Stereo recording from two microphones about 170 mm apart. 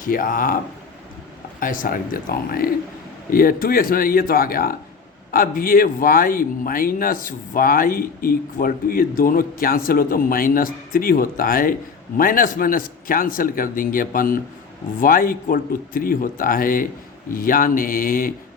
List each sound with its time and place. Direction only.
0.0 s speech: 55° left (ahead or behind)
1.5 s speech: 50° left (ahead or behind)